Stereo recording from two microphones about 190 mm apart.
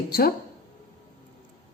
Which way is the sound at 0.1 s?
50° left (ahead or behind).